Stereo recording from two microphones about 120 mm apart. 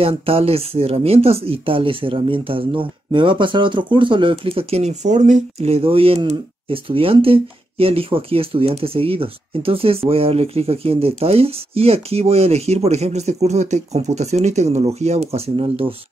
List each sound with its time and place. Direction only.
0.0 s speech: 55° right (ahead or behind)